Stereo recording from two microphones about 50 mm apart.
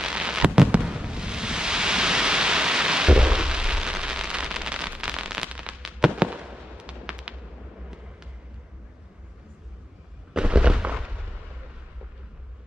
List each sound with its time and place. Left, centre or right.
0.0 s fireworks: centre
5.8 s fireworks: centre
6.1 s fireworks: right
10.3 s fireworks: centre